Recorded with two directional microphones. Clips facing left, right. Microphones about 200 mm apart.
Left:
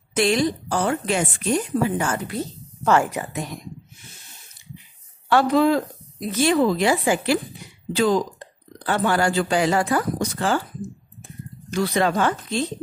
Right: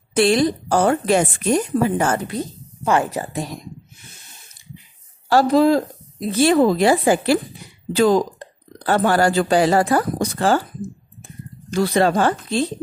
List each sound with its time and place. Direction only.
0.1 s a woman's voice: 35° right (ahead or behind)
2.2 s a woman's voice: 15° right (ahead or behind)
3.1 s a woman's voice: 35° right (ahead or behind)
5.3 s speech: 35° right (ahead or behind)
6.5 s a woman's voice: 40° right (ahead or behind)
11.7 s a woman's voice: 35° right (ahead or behind)